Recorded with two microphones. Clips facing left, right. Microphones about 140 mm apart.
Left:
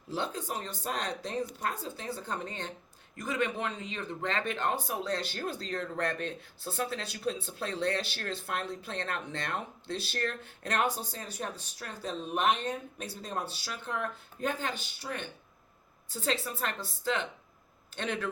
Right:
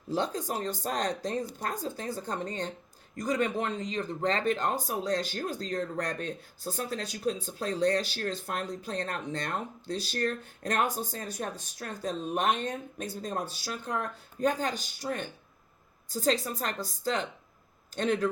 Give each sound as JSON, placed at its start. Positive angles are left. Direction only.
{"t": 0.1, "sound": "speech", "side_deg": -40}